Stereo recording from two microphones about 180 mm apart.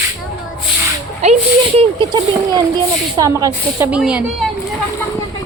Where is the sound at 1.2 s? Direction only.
35° right (ahead or behind).